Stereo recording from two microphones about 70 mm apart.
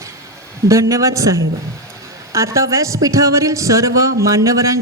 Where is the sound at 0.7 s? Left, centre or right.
Right.